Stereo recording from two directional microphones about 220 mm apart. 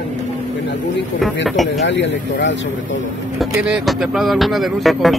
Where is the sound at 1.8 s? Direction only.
55° left (ahead or behind).